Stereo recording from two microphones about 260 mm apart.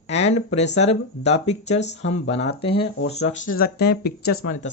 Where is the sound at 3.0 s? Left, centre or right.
Left.